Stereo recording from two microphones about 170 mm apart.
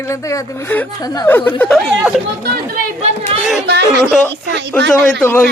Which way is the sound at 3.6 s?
80° right.